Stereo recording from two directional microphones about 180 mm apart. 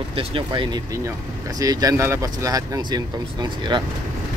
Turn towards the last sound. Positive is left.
turn(degrees=-25)  # may be behind; listen again after turning